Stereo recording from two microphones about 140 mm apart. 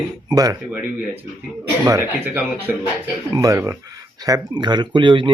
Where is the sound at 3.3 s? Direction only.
20° right (ahead or behind).